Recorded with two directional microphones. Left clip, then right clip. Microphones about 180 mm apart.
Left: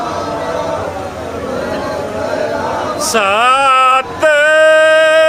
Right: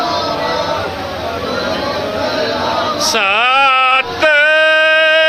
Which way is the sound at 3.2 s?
Centre (ahead or behind).